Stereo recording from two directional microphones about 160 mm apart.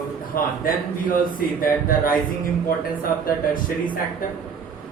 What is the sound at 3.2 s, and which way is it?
Speech, 60° left (ahead or behind).